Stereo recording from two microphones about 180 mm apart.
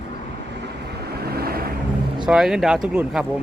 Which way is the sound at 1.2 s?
60° right (ahead or behind).